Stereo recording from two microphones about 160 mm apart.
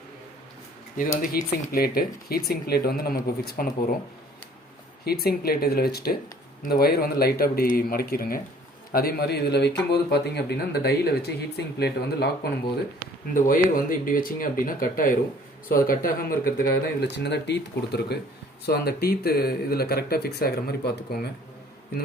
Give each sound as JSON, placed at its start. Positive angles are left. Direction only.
{"t": 1.2, "sound": "speech", "side_deg": 60}
{"t": 5.0, "sound": "a man's voice", "side_deg": 70}
{"t": 13.3, "sound": "speech", "side_deg": 60}
{"t": 18.6, "sound": "speech", "side_deg": 75}